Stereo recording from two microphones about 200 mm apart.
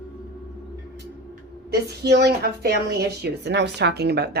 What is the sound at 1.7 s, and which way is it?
A woman's voice, 55° right (ahead or behind).